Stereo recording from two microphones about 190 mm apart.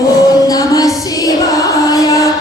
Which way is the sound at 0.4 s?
20° left (ahead or behind).